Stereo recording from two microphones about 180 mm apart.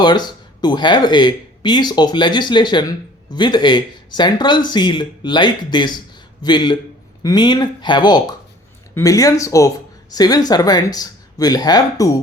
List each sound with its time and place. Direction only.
0.0 s speech: 25° left (ahead or behind)